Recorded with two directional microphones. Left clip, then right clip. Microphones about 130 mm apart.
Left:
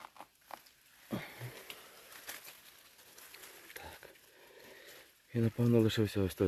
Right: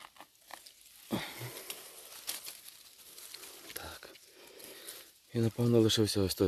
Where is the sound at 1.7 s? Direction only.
55° right (ahead or behind).